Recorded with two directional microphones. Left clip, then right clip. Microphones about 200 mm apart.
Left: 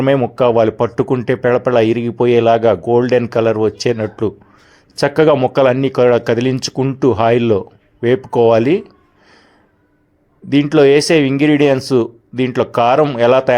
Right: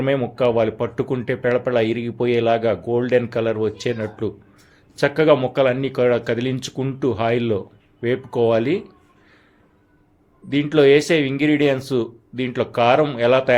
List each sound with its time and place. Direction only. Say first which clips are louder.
0.0 s speech: left 6 dB; 35° left (ahead or behind)
10.5 s speech: left 4 dB; 35° left (ahead or behind)